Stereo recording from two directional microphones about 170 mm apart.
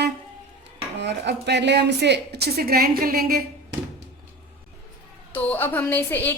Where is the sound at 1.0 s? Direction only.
90° right; by 3.4 s 60° right (ahead or behind).